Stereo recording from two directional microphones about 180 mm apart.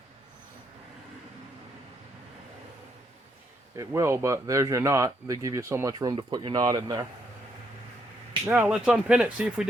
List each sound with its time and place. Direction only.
3.8 s speech: 15° right (ahead or behind)
8.4 s speech: 10° right (ahead or behind)